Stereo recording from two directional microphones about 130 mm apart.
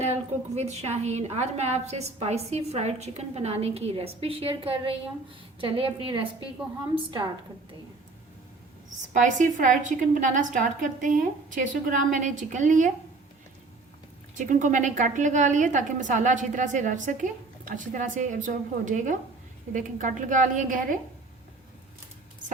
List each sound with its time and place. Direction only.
0.0 s a woman's voice: 55° right (ahead or behind); by 7.3 s 35° right (ahead or behind)
9.0 s a woman's voice: 75° right (ahead or behind)
14.3 s a woman's voice: 70° right (ahead or behind); by 21.0 s 85° right